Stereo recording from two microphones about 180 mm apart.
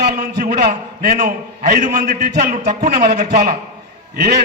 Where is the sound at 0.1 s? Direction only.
55° right (ahead or behind).